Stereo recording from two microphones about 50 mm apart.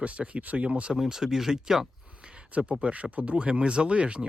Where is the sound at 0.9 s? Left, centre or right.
Centre.